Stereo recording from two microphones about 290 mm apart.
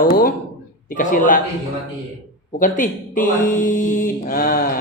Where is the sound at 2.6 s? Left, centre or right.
Left.